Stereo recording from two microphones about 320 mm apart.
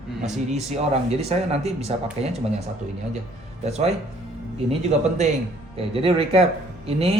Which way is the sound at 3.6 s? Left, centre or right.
Centre.